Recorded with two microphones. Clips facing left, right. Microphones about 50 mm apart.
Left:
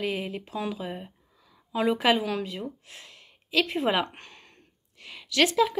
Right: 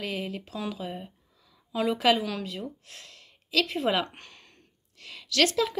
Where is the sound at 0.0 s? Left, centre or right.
Left.